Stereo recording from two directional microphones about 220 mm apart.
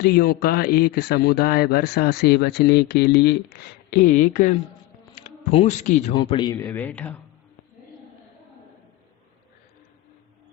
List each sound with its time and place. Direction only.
0.0 s a man's voice: 45° left (ahead or behind)
3.9 s speech: 35° left (ahead or behind)
6.1 s a man's voice: 20° left (ahead or behind)